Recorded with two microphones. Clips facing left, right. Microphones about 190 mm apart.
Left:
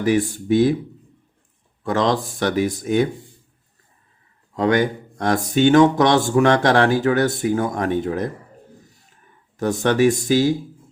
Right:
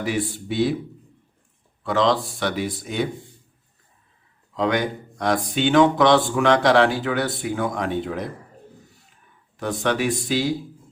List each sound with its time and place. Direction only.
0.0 s speech: 45° left (ahead or behind)
1.8 s speech: 45° left (ahead or behind)
4.5 s speech: 45° left (ahead or behind)
9.6 s speech: 45° left (ahead or behind)